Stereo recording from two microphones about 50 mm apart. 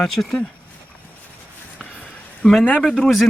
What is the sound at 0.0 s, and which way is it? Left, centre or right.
Speech, centre.